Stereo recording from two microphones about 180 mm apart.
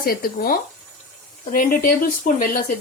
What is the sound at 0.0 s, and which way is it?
Speech, 55° left (ahead or behind).